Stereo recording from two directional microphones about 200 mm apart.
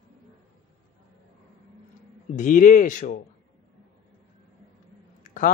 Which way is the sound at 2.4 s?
40° left (ahead or behind).